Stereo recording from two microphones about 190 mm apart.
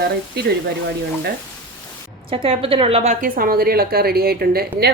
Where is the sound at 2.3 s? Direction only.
30° right (ahead or behind).